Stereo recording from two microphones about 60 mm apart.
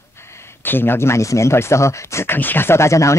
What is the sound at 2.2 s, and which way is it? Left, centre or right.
Speech, left.